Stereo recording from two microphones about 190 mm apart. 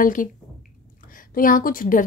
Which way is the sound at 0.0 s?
45° left (ahead or behind).